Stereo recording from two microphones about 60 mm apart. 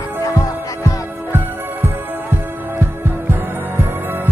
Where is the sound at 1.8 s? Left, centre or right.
Right.